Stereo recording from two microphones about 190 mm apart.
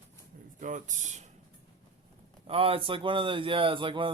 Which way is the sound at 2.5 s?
30° right (ahead or behind).